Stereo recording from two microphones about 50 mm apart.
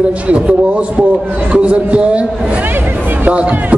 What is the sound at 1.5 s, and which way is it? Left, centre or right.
Speech, right.